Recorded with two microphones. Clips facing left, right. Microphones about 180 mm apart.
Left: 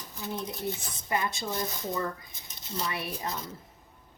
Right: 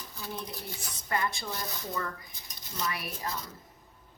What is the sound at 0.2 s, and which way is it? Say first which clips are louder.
Speech: left 5 dB; 20° left (ahead or behind).